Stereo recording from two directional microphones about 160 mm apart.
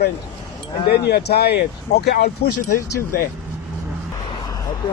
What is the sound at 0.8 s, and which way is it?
A man's voice, 85° left.